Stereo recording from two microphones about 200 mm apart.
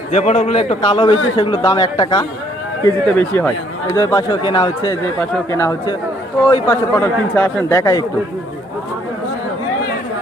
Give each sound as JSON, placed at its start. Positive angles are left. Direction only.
{"t": 0.1, "sound": "speech", "side_deg": 35}
{"t": 2.8, "sound": "a man's voice", "side_deg": 10}